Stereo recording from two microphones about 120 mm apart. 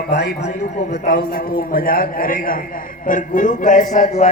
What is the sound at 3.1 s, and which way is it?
A man's voice, 90° left.